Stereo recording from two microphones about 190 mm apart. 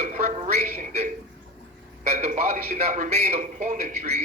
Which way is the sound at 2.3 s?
40° right (ahead or behind).